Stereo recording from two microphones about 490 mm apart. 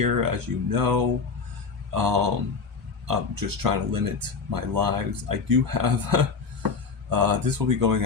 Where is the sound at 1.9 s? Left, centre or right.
Right.